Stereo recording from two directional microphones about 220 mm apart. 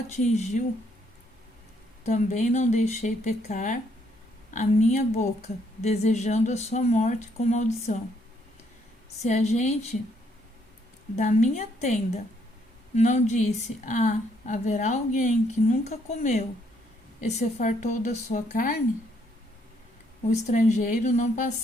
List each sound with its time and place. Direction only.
0.1 s a woman's voice: 30° left (ahead or behind)
2.0 s a woman's voice: 35° left (ahead or behind)
9.2 s a woman's voice: 30° left (ahead or behind)
11.2 s a woman's voice: 35° left (ahead or behind)
20.3 s a woman's voice: 35° left (ahead or behind)